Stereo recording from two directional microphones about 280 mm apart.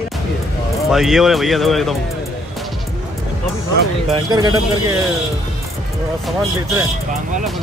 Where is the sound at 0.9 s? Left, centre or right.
Centre.